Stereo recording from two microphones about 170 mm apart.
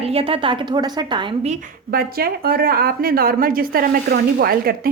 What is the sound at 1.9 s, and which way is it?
Speech, 60° right (ahead or behind).